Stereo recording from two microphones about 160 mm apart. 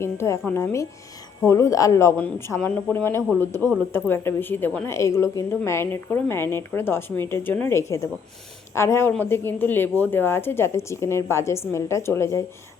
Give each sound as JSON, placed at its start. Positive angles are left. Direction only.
{"t": 0.0, "sound": "a woman's voice", "side_deg": 15}